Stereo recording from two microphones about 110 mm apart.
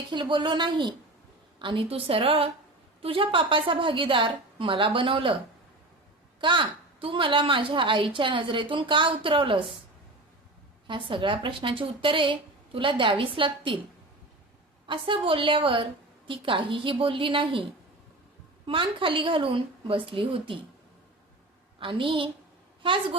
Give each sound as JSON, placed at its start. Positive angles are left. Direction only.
{"t": 0.1, "sound": "a woman's voice", "side_deg": -45}
{"t": 6.4, "sound": "a woman's voice", "side_deg": -50}
{"t": 10.8, "sound": "a woman's voice", "side_deg": -50}
{"t": 14.8, "sound": "a woman's voice", "side_deg": -50}
{"t": 21.8, "sound": "a woman's voice", "side_deg": -50}